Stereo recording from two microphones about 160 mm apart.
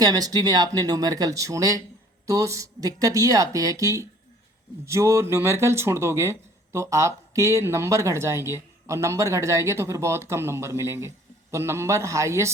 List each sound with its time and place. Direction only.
0.0 s speech: 25° right (ahead or behind)